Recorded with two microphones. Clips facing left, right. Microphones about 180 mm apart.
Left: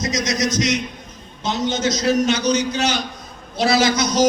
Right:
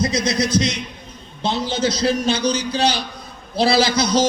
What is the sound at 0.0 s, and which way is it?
A man's voice, 30° right (ahead or behind).